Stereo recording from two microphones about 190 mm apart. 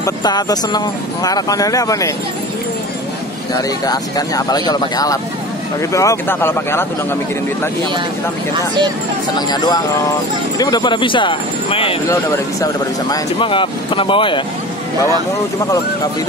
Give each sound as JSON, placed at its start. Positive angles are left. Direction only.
{"t": 0.0, "sound": "speech", "side_deg": 20}
{"t": 3.8, "sound": "speech", "side_deg": 20}
{"t": 9.3, "sound": "speech", "side_deg": 20}
{"t": 12.1, "sound": "speech", "side_deg": 15}
{"t": 13.1, "sound": "speech", "side_deg": 25}